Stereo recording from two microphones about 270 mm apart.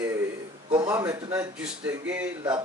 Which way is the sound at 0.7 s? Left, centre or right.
Centre.